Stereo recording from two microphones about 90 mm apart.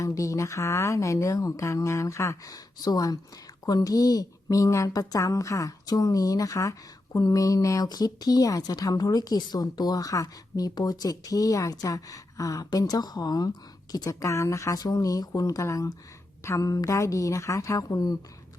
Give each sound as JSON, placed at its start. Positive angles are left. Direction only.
{"t": 0.0, "sound": "a woman's voice", "side_deg": 35}